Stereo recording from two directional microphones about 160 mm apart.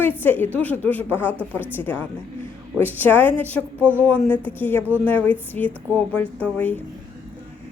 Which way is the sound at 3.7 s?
15° right (ahead or behind).